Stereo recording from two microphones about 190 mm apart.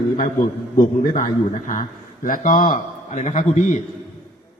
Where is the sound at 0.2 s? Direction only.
45° left (ahead or behind).